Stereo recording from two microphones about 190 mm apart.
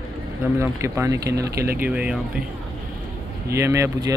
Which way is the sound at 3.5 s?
15° right (ahead or behind).